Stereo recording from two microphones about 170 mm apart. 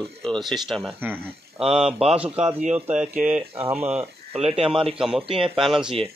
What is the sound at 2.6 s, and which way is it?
Speech, 40° right (ahead or behind).